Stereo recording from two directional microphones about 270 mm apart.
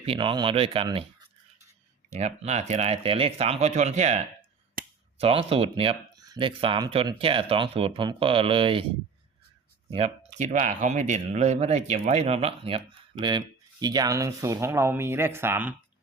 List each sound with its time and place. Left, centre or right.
0.0 s speech: centre
2.1 s speech: right
9.9 s speech: right; by 15.7 s centre